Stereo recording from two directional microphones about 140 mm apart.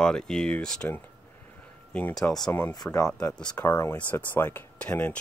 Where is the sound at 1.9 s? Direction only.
10° left (ahead or behind).